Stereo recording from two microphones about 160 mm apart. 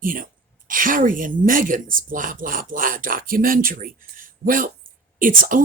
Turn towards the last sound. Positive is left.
turn(degrees=-60)  # may be behind; listen again after turning